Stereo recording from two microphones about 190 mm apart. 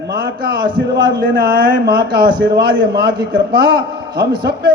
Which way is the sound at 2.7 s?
75° right (ahead or behind).